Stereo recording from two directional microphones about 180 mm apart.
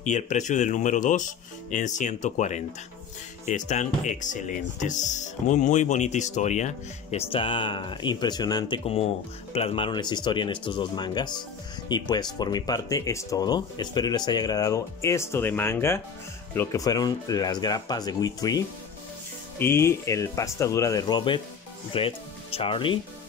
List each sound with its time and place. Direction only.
0.0 s speech: 40° left (ahead or behind); by 18.6 s 20° left (ahead or behind)
19.6 s speech: 15° left (ahead or behind); by 22.9 s 30° left (ahead or behind)